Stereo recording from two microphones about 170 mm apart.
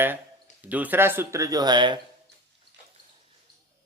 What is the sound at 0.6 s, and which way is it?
Speech, 10° right (ahead or behind).